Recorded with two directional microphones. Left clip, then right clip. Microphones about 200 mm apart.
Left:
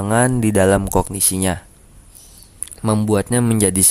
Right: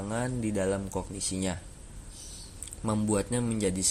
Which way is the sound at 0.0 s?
45° left (ahead or behind).